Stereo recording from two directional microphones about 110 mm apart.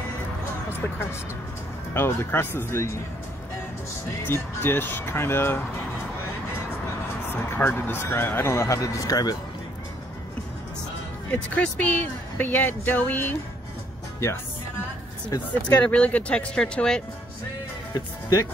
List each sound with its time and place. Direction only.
2.0 s speech: 20° left (ahead or behind)
4.3 s speech: 20° left (ahead or behind)
7.3 s speech: 15° left (ahead or behind); by 9.4 s 35° left (ahead or behind)
11.2 s speech: 10° left (ahead or behind)
15.7 s speech: 10° left (ahead or behind)
17.9 s speech: 30° left (ahead or behind)